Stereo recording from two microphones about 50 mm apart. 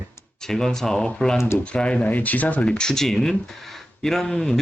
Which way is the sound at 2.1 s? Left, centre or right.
Left.